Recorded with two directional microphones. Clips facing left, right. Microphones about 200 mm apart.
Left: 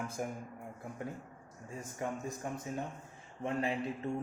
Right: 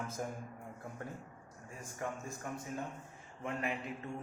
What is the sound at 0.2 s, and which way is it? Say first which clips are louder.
Speech: left 2 dB; 15° left (ahead or behind).